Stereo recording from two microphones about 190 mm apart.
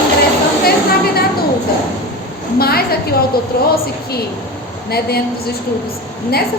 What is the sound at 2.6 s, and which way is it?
A woman's voice, 55° left (ahead or behind).